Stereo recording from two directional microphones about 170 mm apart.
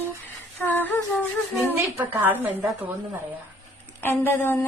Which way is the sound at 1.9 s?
10° right (ahead or behind).